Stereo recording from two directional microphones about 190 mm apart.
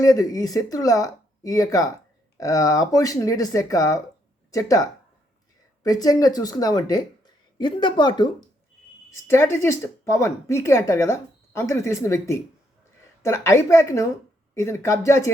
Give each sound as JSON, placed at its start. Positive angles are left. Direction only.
{"t": 0.0, "sound": "speech", "side_deg": 20}